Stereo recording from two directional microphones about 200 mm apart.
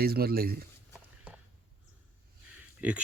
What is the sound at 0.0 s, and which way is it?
Speech, 50° right (ahead or behind).